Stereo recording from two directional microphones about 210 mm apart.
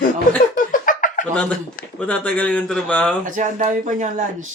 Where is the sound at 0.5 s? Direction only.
40° left (ahead or behind).